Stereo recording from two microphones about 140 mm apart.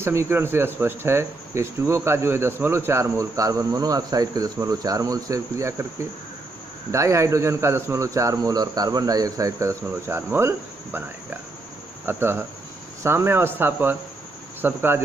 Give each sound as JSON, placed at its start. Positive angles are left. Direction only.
{"t": 0.0, "sound": "speech", "side_deg": -15}
{"t": 12.1, "sound": "speech", "side_deg": -15}